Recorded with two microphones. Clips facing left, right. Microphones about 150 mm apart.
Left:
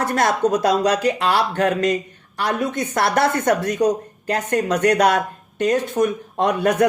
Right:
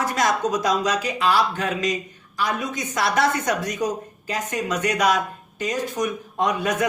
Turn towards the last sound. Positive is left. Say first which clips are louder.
# left 5 dB
turn(degrees=60)  # may be behind; listen again after turning